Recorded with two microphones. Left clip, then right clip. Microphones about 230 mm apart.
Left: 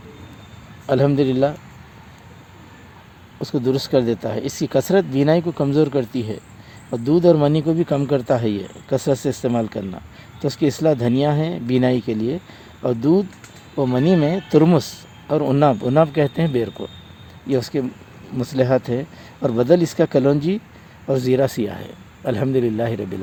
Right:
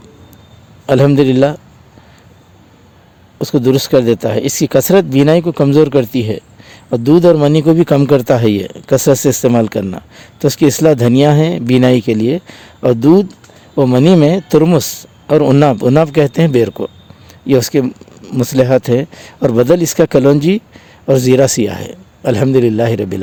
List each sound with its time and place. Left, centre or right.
0.9 s speech: right
3.3 s speech: right